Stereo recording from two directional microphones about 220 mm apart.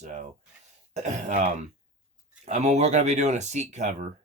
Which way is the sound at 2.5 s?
30° right (ahead or behind).